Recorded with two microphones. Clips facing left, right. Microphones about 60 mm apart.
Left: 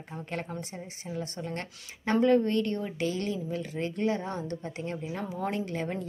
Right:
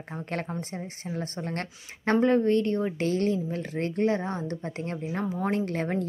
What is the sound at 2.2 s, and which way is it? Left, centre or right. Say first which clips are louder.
Speech: right 1 dB; right.